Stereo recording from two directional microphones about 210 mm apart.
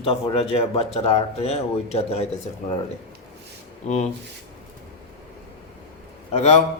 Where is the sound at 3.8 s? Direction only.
35° left (ahead or behind).